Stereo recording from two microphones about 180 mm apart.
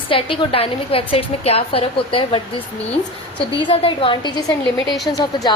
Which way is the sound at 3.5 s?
30° left (ahead or behind).